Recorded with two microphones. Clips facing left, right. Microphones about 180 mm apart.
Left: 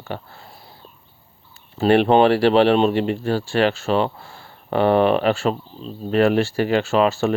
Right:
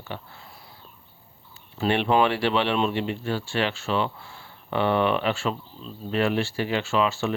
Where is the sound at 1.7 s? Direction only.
40° left (ahead or behind).